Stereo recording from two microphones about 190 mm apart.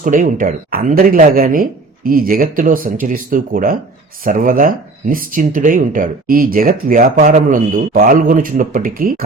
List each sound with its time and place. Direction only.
0.0 s speech: 45° right (ahead or behind)